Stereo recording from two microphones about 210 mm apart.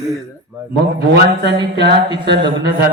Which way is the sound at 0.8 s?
50° right (ahead or behind).